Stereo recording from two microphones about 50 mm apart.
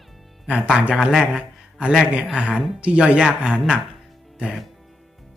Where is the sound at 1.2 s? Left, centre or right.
Centre.